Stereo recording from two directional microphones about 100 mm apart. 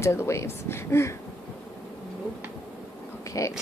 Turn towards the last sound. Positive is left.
turn(degrees=30)  # may be behind; listen again after turning